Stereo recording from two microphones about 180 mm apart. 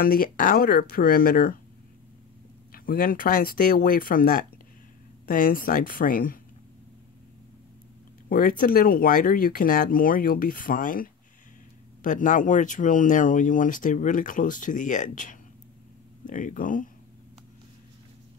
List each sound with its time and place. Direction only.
0.0 s speech: 55° left (ahead or behind)
2.7 s speech: 55° left (ahead or behind)
8.3 s speech: 50° left (ahead or behind)